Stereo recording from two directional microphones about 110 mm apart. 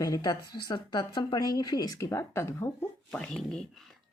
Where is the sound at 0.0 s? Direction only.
35° left (ahead or behind); by 3.2 s 20° left (ahead or behind).